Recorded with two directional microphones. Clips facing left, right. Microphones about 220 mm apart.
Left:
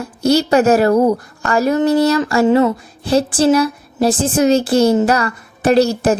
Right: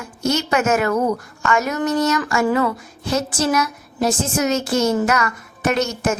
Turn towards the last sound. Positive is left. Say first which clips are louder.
# left 8 dB
turn(degrees=35)  # may be behind; listen again after turning